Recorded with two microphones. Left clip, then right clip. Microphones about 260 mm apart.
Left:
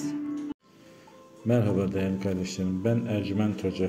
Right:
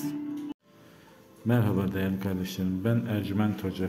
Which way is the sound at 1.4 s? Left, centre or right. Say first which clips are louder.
Left 3 dB; centre.